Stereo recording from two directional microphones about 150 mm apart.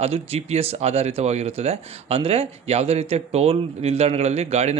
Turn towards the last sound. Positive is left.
turn(degrees=-45)  # may be behind; listen again after turning